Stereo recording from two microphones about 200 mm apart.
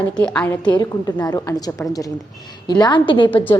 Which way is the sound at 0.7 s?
20° left (ahead or behind).